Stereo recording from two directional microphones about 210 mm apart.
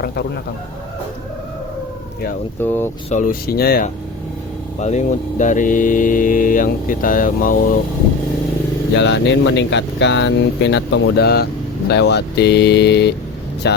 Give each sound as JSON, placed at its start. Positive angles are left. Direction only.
{"t": 2.6, "sound": "speech", "side_deg": 10}
{"t": 3.1, "sound": "speech", "side_deg": 40}
{"t": 4.8, "sound": "speech", "side_deg": 35}
{"t": 9.0, "sound": "speech", "side_deg": 55}